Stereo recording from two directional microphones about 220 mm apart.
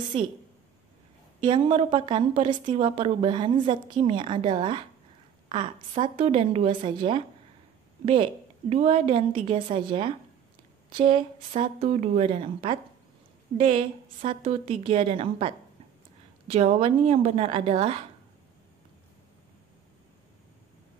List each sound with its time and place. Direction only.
1.4 s speech: 25° right (ahead or behind)